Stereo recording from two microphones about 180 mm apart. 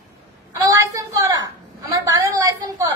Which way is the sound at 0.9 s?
20° right (ahead or behind).